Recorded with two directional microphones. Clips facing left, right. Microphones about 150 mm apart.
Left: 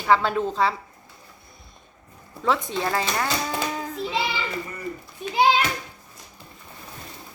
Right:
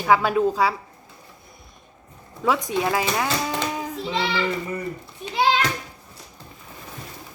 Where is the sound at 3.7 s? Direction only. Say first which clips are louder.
Right 1 dB; 15° right (ahead or behind).